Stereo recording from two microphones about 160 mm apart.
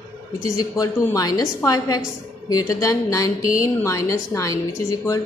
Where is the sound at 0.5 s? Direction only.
20° left (ahead or behind).